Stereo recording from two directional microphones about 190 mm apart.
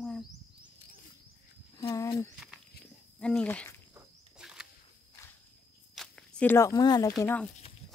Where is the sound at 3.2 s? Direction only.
5° left (ahead or behind).